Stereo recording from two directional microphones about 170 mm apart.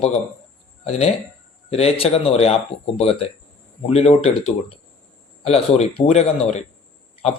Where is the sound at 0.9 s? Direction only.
40° left (ahead or behind).